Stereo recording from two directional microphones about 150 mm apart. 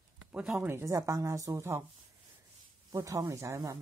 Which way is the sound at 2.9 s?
20° right (ahead or behind).